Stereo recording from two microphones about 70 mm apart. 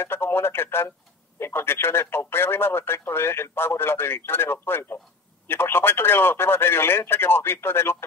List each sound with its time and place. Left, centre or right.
0.0 s speech: left